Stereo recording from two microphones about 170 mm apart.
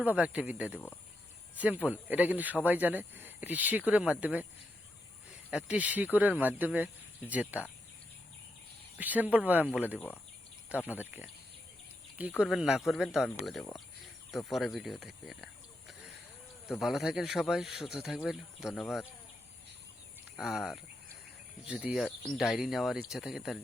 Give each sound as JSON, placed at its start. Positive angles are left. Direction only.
{"t": 0.0, "sound": "speech", "side_deg": -10}
{"t": 5.5, "sound": "speech", "side_deg": -5}
{"t": 9.0, "sound": "speech", "side_deg": -10}
{"t": 12.4, "sound": "speech", "side_deg": -5}
{"t": 16.6, "sound": "speech", "side_deg": 0}
{"t": 20.3, "sound": "speech", "side_deg": -5}